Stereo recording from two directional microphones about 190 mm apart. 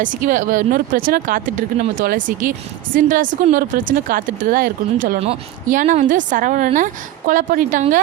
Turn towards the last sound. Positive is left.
turn(degrees=-45)  # may be behind; listen again after turning